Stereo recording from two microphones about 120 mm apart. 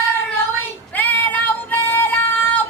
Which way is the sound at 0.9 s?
15° left (ahead or behind).